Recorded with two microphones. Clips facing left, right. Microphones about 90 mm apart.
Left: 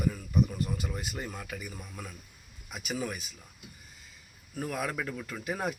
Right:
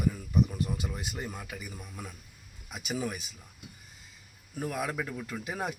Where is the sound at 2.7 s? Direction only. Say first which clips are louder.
Right 1 dB; 25° right (ahead or behind).